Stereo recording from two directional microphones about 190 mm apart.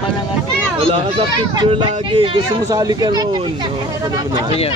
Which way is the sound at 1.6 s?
25° right (ahead or behind).